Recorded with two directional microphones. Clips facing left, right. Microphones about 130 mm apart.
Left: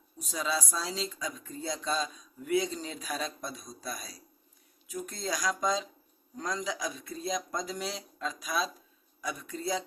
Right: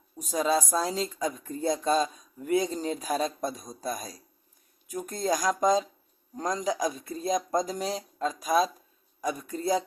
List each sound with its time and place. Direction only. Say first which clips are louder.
0.2 s speech: right 7 dB; 45° right (ahead or behind)